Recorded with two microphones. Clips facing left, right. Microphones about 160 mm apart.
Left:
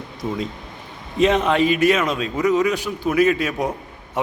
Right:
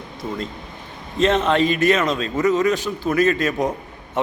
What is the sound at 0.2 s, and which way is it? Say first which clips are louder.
A man's voice: left 2 dB; 15° left (ahead or behind).